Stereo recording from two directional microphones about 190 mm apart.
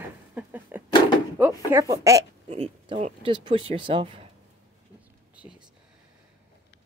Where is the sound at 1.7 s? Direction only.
15° right (ahead or behind).